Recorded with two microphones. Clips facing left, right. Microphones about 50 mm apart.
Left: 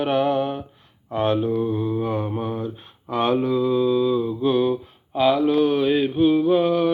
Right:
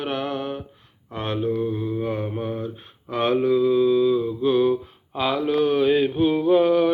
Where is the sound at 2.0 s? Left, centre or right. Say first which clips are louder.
Left 1 dB; centre.